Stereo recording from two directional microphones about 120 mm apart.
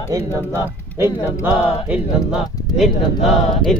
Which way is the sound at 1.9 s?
5° right (ahead or behind).